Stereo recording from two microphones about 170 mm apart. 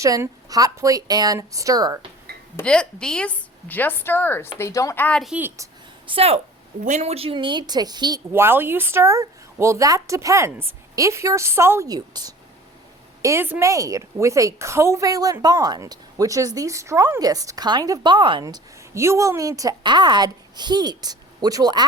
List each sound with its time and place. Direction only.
0.0 s a woman's voice: 20° right (ahead or behind)
2.6 s a woman's voice: 5° left (ahead or behind)
5.3 s speech: 10° right (ahead or behind)
6.1 s a woman's voice: 35° right (ahead or behind)
8.3 s a woman's voice: 15° right (ahead or behind)